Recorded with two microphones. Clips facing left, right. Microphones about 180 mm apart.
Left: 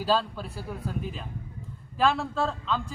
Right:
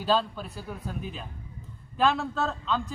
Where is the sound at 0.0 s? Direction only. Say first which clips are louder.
Even; 5° left (ahead or behind).